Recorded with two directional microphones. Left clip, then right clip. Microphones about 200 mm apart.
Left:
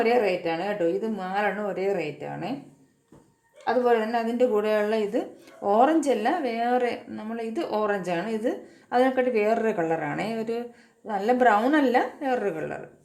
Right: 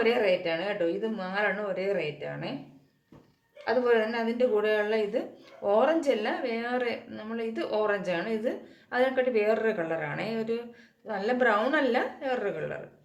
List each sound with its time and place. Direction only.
0.0 s speech: 45° left (ahead or behind)
3.8 s a woman's voice: 35° left (ahead or behind)